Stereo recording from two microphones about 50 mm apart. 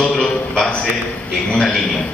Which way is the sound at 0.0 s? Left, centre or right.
Centre.